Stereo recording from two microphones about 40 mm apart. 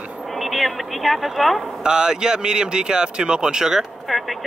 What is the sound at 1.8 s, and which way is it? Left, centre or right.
Speech, centre.